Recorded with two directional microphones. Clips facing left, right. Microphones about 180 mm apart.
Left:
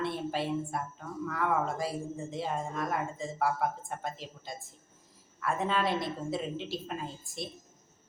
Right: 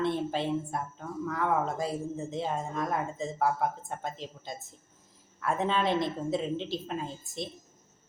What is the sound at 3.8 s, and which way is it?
Speech, 20° right (ahead or behind).